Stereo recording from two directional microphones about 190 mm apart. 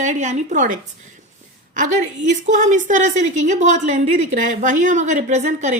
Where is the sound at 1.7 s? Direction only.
40° right (ahead or behind).